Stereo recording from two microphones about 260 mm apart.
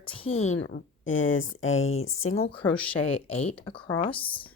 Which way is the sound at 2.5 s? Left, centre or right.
Centre.